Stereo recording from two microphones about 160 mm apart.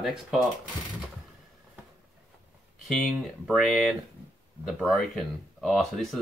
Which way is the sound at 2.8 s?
Centre (ahead or behind).